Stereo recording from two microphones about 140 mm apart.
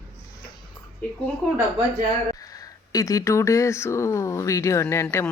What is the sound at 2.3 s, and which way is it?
Speech, 25° left (ahead or behind).